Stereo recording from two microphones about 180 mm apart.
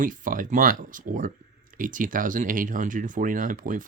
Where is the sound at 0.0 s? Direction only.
50° right (ahead or behind).